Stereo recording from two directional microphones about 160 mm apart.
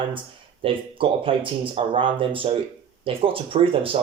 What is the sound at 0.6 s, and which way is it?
Speech, 35° right (ahead or behind).